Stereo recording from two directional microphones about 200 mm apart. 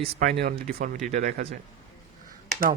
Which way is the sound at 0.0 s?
40° right (ahead or behind).